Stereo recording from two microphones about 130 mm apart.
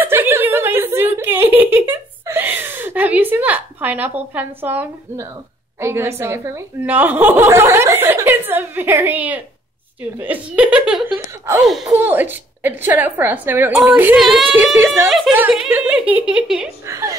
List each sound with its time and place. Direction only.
0.0 s a sound: 20° right (ahead or behind)
5.8 s a woman's voice: 20° right (ahead or behind); by 11.9 s centre (ahead or behind)
12.0 s a woman's voice: 15° right (ahead or behind)
15.0 s a woman's voice: centre (ahead or behind)
16.8 s a woman's voice: 25° right (ahead or behind)